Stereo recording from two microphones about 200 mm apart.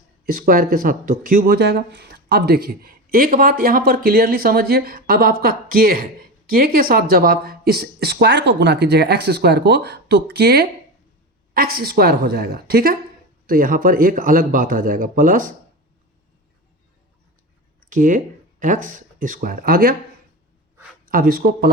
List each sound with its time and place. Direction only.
0.3 s a woman's voice: 45° right (ahead or behind)
17.8 s speech: 40° right (ahead or behind)
21.1 s speech: 50° right (ahead or behind)